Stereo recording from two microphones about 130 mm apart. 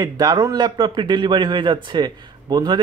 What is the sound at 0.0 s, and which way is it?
A man's voice, 30° right (ahead or behind).